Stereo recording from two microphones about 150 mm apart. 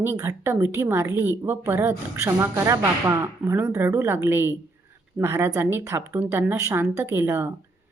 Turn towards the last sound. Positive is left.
turn(degrees=-15)  # may be behind; listen again after turning